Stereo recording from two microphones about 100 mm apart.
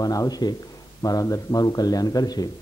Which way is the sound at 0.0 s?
35° left (ahead or behind).